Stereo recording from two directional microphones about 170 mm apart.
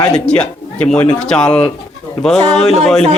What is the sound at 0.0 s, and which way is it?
A woman's voice, 5° left (ahead or behind).